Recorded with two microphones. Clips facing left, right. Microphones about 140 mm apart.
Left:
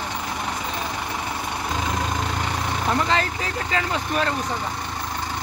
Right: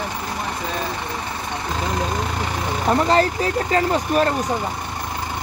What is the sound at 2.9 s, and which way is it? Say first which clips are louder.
Speech: right 6 dB; 40° right (ahead or behind).